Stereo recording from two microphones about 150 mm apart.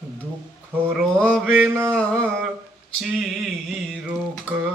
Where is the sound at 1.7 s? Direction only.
20° right (ahead or behind).